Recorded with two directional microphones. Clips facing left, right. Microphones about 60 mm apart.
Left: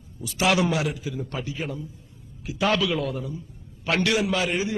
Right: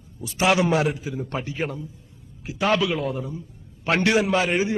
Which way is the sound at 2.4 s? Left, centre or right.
Right.